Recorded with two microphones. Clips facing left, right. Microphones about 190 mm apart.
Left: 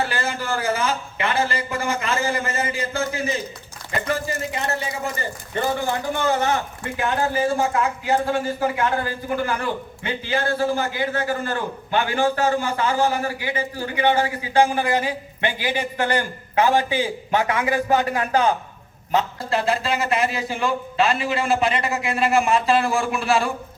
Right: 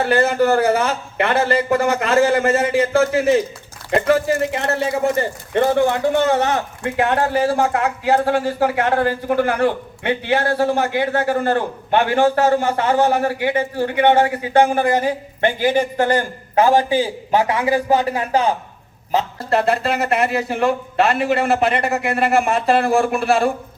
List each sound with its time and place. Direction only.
0.0 s a man's voice: 60° right (ahead or behind); by 18.5 s 30° right (ahead or behind)
19.5 s a man's voice: 60° right (ahead or behind)